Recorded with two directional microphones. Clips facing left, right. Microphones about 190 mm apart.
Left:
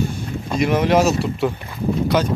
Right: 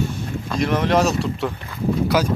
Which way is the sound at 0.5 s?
5° left (ahead or behind).